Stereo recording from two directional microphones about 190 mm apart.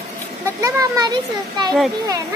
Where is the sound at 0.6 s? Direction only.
15° right (ahead or behind).